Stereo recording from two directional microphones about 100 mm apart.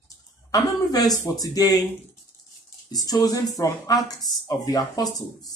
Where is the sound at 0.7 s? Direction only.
40° left (ahead or behind).